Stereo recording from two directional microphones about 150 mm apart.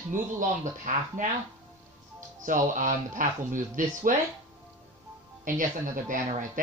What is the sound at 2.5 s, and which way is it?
Speech, 60° right (ahead or behind).